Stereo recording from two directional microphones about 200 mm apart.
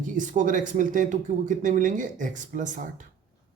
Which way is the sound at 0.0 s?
40° right (ahead or behind).